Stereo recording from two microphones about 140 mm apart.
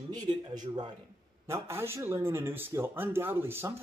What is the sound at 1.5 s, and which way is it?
Speech, 20° right (ahead or behind).